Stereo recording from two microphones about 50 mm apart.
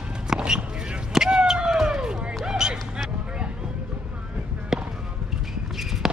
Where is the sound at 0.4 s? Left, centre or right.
Centre.